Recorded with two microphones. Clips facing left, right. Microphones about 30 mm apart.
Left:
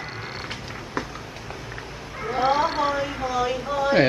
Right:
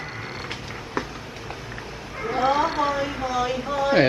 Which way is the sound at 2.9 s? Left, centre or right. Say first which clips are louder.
Even; centre.